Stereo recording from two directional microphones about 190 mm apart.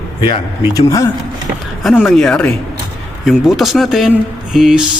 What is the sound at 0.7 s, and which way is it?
Speech, 15° left (ahead or behind).